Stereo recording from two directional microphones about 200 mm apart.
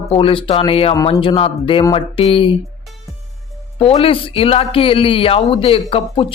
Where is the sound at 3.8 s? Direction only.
30° left (ahead or behind).